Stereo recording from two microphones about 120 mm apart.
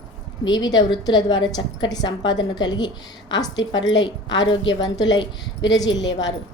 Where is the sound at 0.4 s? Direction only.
35° left (ahead or behind).